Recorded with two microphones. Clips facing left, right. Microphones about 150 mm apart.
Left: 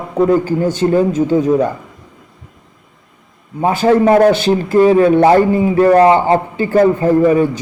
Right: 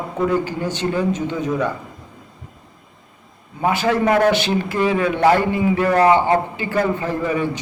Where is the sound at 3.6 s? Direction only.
35° left (ahead or behind).